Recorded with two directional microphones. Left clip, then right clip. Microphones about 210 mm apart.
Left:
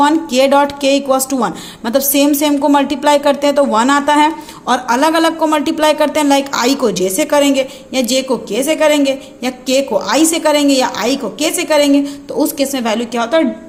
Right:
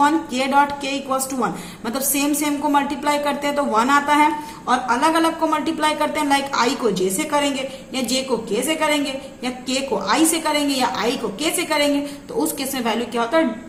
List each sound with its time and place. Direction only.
0.0 s a man's voice: 40° left (ahead or behind)